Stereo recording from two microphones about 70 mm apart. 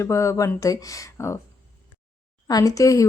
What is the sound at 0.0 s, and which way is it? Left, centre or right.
Speech, left.